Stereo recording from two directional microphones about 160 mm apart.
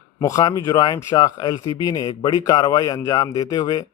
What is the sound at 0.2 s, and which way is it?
Speech, 20° left (ahead or behind).